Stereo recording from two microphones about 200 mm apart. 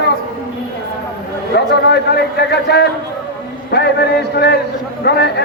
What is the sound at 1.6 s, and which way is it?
A man's voice, 60° left (ahead or behind).